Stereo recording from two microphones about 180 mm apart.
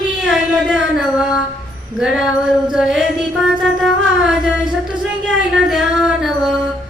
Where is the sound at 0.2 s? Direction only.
5° right (ahead or behind).